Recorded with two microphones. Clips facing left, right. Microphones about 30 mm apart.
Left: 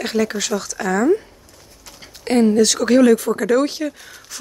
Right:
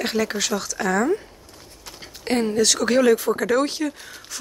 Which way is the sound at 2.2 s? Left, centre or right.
Centre.